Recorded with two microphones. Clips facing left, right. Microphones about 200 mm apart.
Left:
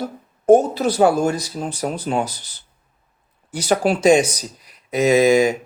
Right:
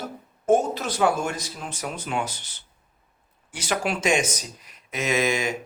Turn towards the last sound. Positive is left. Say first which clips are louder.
# left 10 dB
turn(degrees=35)  # may be behind; listen again after turning